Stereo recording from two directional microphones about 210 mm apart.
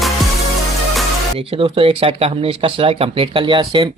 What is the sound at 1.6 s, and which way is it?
Speech, 25° right (ahead or behind).